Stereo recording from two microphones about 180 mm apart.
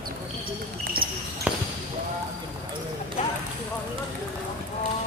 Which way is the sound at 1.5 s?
10° right (ahead or behind).